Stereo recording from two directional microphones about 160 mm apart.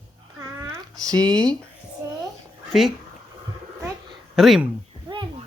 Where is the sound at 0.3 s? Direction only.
20° right (ahead or behind).